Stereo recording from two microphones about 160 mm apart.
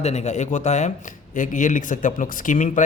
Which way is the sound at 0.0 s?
45° left (ahead or behind).